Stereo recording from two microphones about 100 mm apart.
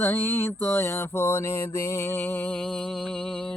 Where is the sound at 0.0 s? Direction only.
20° left (ahead or behind).